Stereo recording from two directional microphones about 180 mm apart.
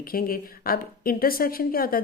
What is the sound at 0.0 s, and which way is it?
A woman's voice, 55° left (ahead or behind).